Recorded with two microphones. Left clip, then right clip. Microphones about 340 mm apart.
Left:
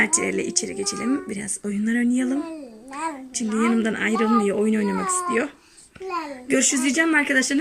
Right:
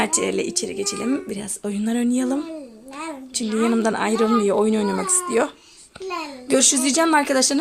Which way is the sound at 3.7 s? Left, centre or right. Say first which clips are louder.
Right 2 dB; right.